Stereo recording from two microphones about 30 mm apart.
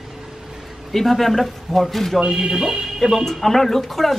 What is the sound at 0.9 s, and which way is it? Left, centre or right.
Speech, centre.